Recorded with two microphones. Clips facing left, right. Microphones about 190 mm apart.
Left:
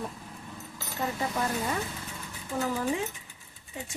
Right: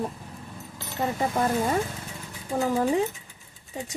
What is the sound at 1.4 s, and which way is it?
Speech, 50° right (ahead or behind).